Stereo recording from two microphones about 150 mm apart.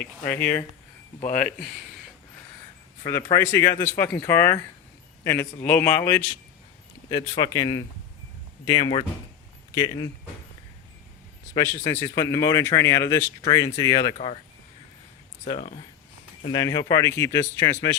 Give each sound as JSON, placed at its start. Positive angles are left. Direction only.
{"t": 0.0, "sound": "a man's voice", "side_deg": 10}
{"t": 3.1, "sound": "speech", "side_deg": 25}
{"t": 3.8, "sound": "a man's voice", "side_deg": 15}
{"t": 7.1, "sound": "speech", "side_deg": 25}
{"t": 11.5, "sound": "speech", "side_deg": 25}
{"t": 15.4, "sound": "speech", "side_deg": 45}
{"t": 16.5, "sound": "speech", "side_deg": 25}